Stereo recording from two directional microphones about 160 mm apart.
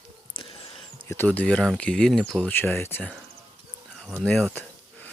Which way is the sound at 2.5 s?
15° left (ahead or behind).